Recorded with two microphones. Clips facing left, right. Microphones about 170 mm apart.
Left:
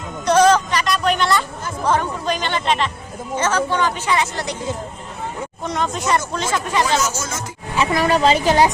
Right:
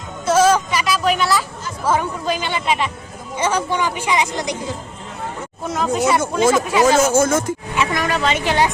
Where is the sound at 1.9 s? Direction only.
5° right (ahead or behind).